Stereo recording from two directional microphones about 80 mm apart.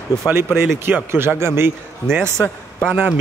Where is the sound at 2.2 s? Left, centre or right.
Centre.